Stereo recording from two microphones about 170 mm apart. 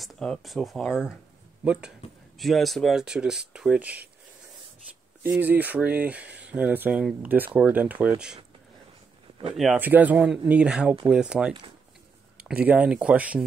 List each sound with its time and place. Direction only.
0.0 s speech: centre (ahead or behind)
5.2 s speech: 10° right (ahead or behind)
9.8 s speech: 10° right (ahead or behind)